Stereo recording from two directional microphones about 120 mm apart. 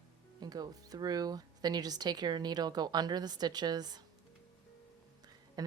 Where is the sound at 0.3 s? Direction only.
35° right (ahead or behind).